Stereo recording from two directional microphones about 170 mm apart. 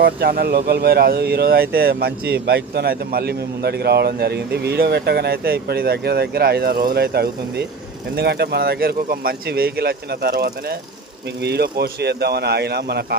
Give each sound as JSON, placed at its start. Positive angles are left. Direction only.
{"t": 0.0, "sound": "speech", "side_deg": -65}